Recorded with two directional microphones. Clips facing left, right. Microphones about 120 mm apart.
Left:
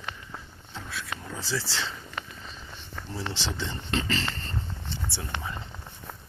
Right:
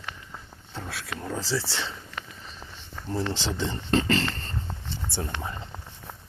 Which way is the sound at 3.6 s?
40° right (ahead or behind).